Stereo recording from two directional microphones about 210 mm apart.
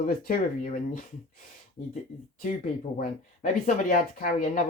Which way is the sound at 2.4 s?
40° left (ahead or behind).